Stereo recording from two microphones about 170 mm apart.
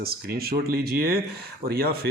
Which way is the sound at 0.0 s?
65° right (ahead or behind).